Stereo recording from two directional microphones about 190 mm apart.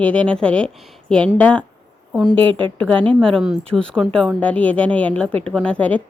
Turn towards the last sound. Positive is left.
turn(degrees=5)  # may be behind; listen again after turning